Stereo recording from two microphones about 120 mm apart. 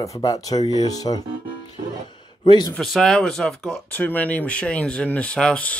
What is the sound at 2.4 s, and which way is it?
Speech, 40° left (ahead or behind).